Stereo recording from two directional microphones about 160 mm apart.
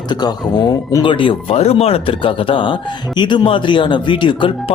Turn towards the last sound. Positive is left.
turn(degrees=30)  # may be behind; listen again after turning